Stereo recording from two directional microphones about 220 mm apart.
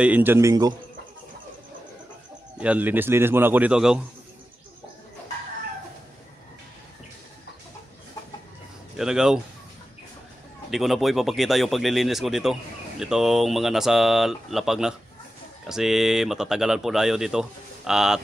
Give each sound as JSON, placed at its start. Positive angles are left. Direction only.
{"t": 0.0, "sound": "a man's voice", "side_deg": -10}
{"t": 2.6, "sound": "a man's voice", "side_deg": -5}
{"t": 8.9, "sound": "speech", "side_deg": -5}
{"t": 10.7, "sound": "speech", "side_deg": 0}